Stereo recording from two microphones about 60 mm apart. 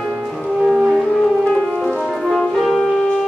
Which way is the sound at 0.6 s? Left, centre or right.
Centre.